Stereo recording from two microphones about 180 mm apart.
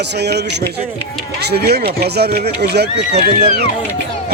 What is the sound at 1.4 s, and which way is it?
Speech, 60° right (ahead or behind).